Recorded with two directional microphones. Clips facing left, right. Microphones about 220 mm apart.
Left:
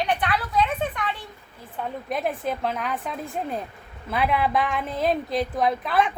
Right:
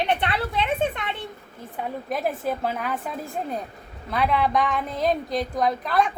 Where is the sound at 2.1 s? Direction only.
5° right (ahead or behind).